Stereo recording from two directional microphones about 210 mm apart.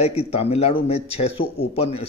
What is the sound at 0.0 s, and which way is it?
Speech, 30° left (ahead or behind).